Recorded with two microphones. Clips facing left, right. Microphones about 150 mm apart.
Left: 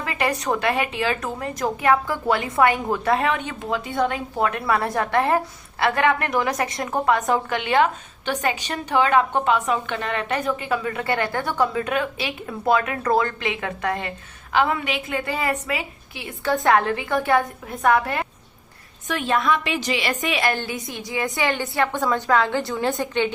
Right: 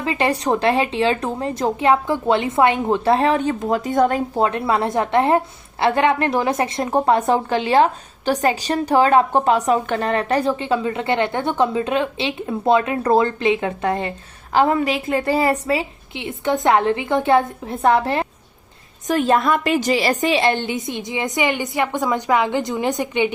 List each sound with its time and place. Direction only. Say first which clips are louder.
0.0 s a woman's voice: right 4 dB; 25° right (ahead or behind); by 4.2 s 40° right (ahead or behind)
4.4 s a woman's voice: right 1 dB; 25° right (ahead or behind)
14.5 s a woman's voice: right 5 dB; 40° right (ahead or behind)
19.0 s a woman's voice: right 5 dB; 40° right (ahead or behind); by 23.3 s 15° right (ahead or behind)